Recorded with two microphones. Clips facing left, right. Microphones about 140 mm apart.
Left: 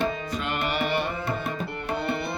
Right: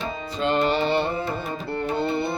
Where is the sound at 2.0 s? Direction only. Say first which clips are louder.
Right 3 dB; 25° right (ahead or behind).